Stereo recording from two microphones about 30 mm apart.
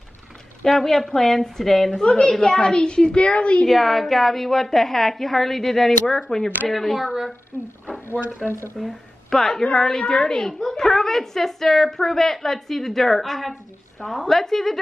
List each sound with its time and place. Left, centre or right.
0.7 s a woman's voice: centre
2.0 s a woman's voice: left
3.2 s a woman's voice: left
3.6 s a woman's voice: centre; by 6.5 s left
6.7 s speech: centre
7.5 s speech: right
8.4 s speech: centre
9.5 s a woman's voice: left
10.6 s a woman's voice: centre